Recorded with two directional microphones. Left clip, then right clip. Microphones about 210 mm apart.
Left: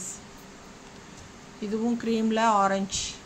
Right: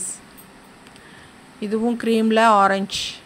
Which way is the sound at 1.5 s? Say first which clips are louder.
Right 7 dB; 45° right (ahead or behind).